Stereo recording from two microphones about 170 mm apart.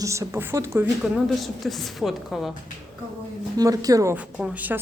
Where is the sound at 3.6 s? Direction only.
20° right (ahead or behind).